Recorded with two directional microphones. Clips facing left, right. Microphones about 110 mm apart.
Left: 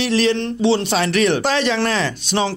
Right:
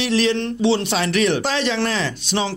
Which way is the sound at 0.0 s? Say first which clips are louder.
Left 1 dB; 40° left (ahead or behind).